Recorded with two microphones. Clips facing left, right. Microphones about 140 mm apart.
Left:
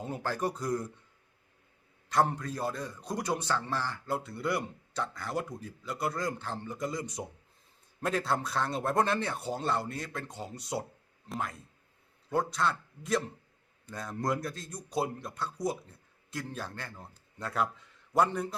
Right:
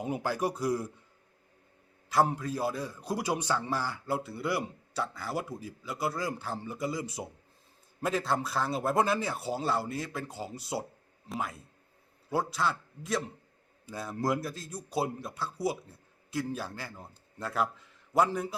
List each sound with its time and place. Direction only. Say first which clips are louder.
0.0 s a man's voice: right 2 dB; 10° right (ahead or behind)
2.0 s a man's voice: right 1 dB; 5° right (ahead or behind)